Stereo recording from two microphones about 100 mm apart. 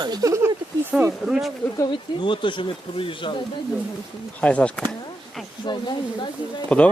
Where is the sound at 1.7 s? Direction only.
45° left (ahead or behind); by 3.3 s 60° left (ahead or behind).